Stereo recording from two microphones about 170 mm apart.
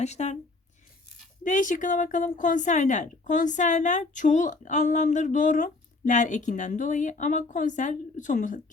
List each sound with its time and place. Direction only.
0.0 s speech: 40° left (ahead or behind)
1.5 s a woman's voice: 45° left (ahead or behind)